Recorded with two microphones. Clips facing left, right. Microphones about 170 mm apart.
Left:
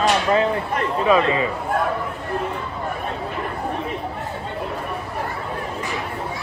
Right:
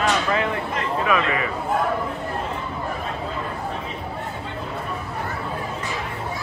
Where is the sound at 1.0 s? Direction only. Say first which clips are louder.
Left 6 dB; 30° left (ahead or behind).